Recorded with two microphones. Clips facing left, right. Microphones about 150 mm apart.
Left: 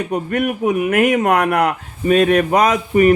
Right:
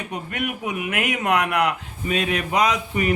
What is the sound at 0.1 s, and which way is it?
Speech, 45° left (ahead or behind).